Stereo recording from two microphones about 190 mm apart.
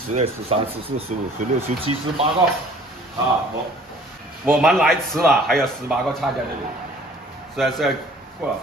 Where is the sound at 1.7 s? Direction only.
40° right (ahead or behind).